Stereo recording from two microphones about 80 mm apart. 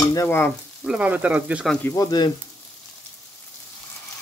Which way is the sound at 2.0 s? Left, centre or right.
Left.